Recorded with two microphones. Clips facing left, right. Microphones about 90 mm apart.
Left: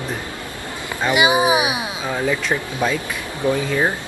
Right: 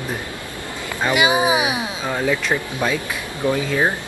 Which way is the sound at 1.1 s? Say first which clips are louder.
Left 1 dB; 20° left (ahead or behind).